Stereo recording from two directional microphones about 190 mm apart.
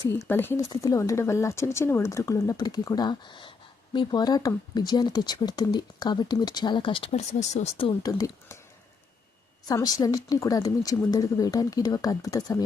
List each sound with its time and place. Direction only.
0.3 s speech: 10° left (ahead or behind)
9.6 s speech: 20° left (ahead or behind)